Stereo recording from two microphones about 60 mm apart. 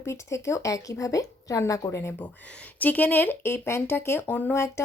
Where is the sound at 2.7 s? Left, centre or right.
Left.